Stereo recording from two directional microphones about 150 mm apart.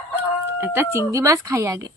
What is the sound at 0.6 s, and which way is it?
Speech, 20° right (ahead or behind).